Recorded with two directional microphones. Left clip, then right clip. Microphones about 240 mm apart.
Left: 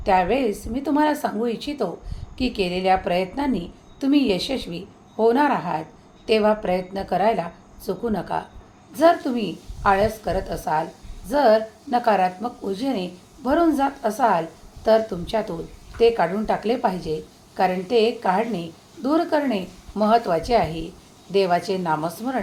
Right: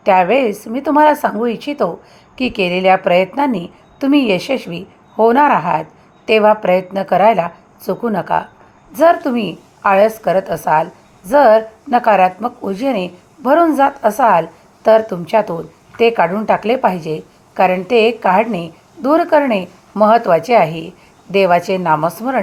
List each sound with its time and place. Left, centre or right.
0.0 s speech: right
20.7 s a woman's voice: right
21.3 s speech: right